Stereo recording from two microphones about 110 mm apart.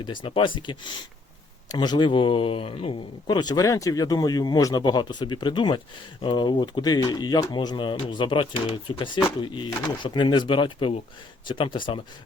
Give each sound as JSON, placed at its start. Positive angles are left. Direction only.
{"t": 0.0, "sound": "speech", "side_deg": 50}
{"t": 3.2, "sound": "speech", "side_deg": 40}